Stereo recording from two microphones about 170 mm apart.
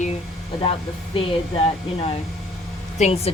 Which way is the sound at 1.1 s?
30° left (ahead or behind).